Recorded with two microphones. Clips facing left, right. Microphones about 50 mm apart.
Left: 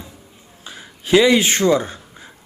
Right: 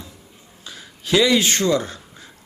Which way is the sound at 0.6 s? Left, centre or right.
Left.